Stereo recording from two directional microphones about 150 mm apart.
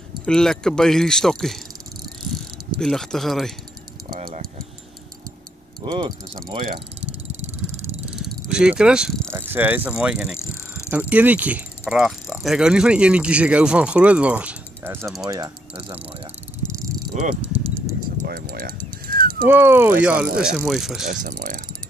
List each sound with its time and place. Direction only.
0.2 s speech: 5° left (ahead or behind)
2.3 s pulleys: centre (ahead or behind)
5.8 s cricket: 30° right (ahead or behind)
7.0 s vehicle: 15° right (ahead or behind)
8.5 s speech: 5° right (ahead or behind)
9.3 s speech: 15° right (ahead or behind)
17.1 s speech: 55° right (ahead or behind)
18.2 s speech: 85° right
19.0 s dog: 75° right (ahead or behind)
19.4 s speech: 15° right (ahead or behind)
21.1 s speech: 60° right (ahead or behind)